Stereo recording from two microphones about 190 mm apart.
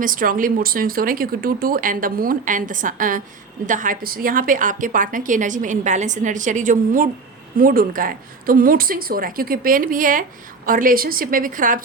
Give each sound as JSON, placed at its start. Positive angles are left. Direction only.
{"t": 0.0, "sound": "a woman's voice", "side_deg": -45}